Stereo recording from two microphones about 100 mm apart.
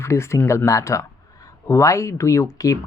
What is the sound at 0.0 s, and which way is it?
Speech, 30° left (ahead or behind).